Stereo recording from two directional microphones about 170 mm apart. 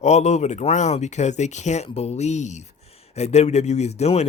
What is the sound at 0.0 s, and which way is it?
Speech, 40° left (ahead or behind).